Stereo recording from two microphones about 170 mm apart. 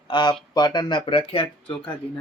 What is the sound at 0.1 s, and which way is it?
Speech, 25° left (ahead or behind).